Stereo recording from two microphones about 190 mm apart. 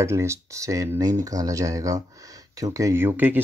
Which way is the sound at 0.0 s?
15° right (ahead or behind).